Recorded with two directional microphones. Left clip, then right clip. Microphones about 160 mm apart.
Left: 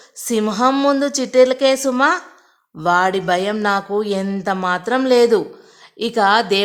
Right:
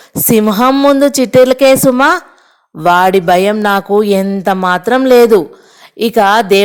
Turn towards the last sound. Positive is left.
turn(degrees=-35)  # may be behind; listen again after turning